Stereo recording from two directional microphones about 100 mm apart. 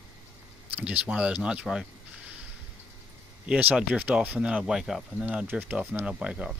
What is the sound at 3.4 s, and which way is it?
Speech, 10° right (ahead or behind).